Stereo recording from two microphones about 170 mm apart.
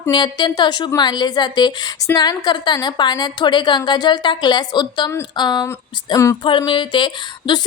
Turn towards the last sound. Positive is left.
turn(degrees=25)  # may be behind; listen again after turning